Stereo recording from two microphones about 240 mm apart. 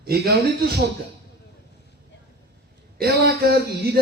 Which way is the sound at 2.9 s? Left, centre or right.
Right.